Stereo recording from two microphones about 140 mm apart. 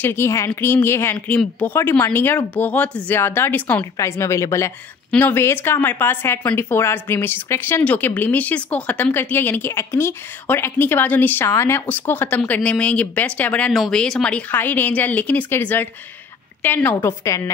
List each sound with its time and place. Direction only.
0.0 s a woman's voice: 15° left (ahead or behind)